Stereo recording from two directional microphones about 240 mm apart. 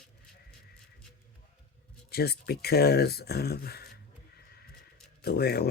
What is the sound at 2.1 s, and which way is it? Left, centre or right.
Speech, left.